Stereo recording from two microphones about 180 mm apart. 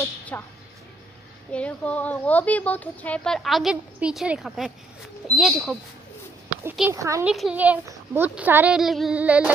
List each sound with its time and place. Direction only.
0.3 s speech: 10° left (ahead or behind)
1.5 s speech: 5° left (ahead or behind)
6.6 s speech: 15° right (ahead or behind)
7.2 s speech: 5° right (ahead or behind)